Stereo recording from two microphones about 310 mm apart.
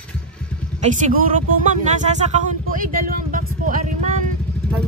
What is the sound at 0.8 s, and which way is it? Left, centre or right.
Speech, right.